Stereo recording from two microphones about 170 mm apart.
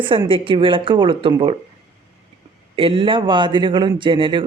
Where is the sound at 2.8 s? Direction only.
30° right (ahead or behind).